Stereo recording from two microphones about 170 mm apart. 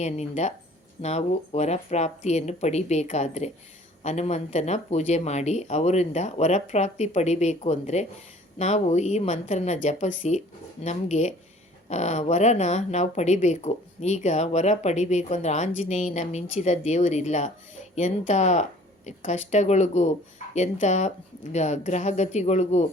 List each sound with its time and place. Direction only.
0.0 s speech: 40° left (ahead or behind)